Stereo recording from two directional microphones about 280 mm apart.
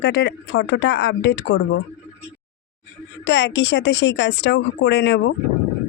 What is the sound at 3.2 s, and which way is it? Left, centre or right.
Speech, left.